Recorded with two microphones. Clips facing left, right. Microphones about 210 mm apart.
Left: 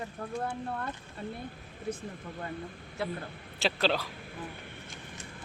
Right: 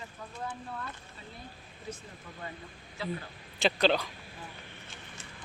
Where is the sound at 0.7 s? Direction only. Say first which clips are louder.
Left 5 dB; 55° left (ahead or behind).